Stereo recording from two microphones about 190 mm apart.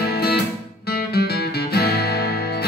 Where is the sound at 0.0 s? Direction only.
55° left (ahead or behind).